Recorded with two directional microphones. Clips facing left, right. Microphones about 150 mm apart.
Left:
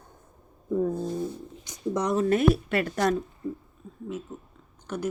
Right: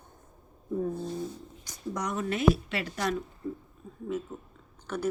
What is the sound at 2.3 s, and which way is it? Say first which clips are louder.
Speech: left 1 dB; 50° left (ahead or behind).